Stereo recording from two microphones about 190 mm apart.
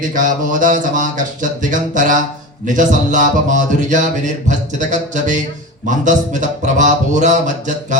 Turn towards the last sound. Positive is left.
turn(degrees=-40)  # may be behind; listen again after turning